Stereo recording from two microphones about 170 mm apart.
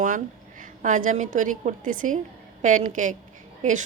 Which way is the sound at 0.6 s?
50° right (ahead or behind).